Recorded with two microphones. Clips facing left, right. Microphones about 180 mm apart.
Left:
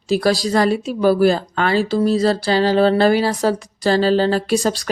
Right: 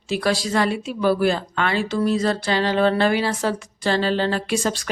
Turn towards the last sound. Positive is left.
turn(degrees=35)  # may be behind; listen again after turning